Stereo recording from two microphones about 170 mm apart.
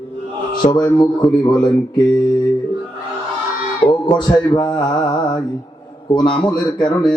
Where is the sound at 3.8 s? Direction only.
25° left (ahead or behind).